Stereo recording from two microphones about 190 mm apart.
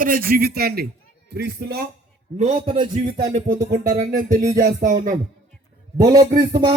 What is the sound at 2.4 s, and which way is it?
A man's voice, 35° right (ahead or behind).